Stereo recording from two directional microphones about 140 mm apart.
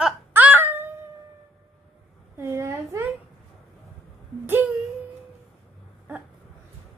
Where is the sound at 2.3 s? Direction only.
20° right (ahead or behind).